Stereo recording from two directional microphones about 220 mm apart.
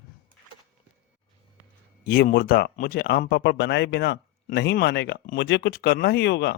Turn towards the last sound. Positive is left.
turn(degrees=50)  # may be behind; listen again after turning